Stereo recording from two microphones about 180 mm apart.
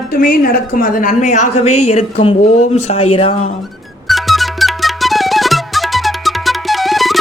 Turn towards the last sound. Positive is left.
turn(degrees=0)  # may be behind; listen again after turning